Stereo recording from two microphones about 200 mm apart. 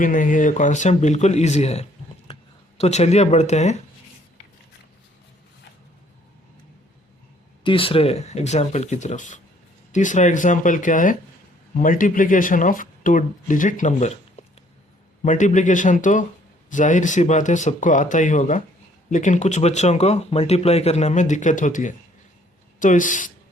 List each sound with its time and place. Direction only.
0.0 s speech: 40° left (ahead or behind)
7.6 s speech: 25° left (ahead or behind)
15.2 s speech: 40° left (ahead or behind)